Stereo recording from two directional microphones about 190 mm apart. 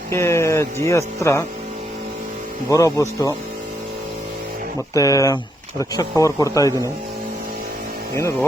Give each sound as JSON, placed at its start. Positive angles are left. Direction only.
{"t": 0.1, "sound": "speech", "side_deg": 15}
{"t": 2.6, "sound": "speech", "side_deg": 15}
{"t": 4.9, "sound": "speech", "side_deg": 20}
{"t": 8.1, "sound": "speech", "side_deg": 15}